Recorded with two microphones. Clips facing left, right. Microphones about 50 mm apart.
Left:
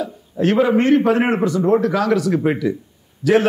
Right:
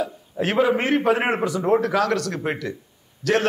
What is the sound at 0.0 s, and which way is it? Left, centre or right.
A man's voice, centre.